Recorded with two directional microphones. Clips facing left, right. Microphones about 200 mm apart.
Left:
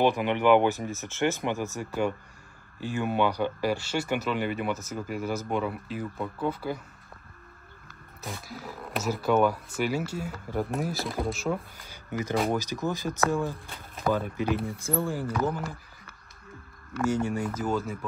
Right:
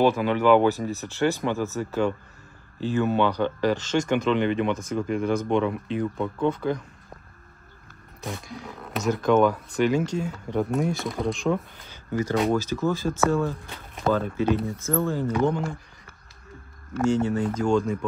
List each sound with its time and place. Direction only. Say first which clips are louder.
0.0 s speech: right 3 dB; 15° left (ahead or behind)
8.2 s speech: right 4 dB; 5° left (ahead or behind)
17.1 s speech: right 5 dB; 10° left (ahead or behind)